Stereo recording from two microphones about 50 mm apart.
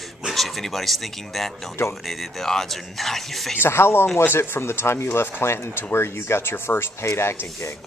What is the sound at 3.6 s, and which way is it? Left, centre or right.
Speech, left.